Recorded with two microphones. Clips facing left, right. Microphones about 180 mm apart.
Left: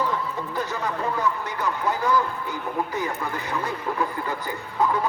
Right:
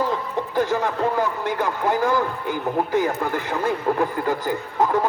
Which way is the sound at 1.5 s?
50° right (ahead or behind).